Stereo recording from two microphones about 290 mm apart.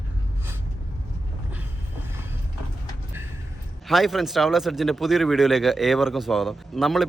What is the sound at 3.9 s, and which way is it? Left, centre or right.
Speech, centre.